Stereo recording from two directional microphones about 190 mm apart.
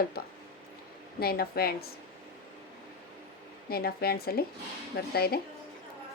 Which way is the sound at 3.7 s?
55° left (ahead or behind).